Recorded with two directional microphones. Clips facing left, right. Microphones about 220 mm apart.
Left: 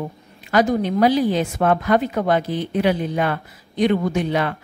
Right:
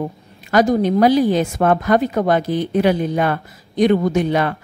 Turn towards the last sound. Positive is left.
turn(degrees=-45)  # may be behind; listen again after turning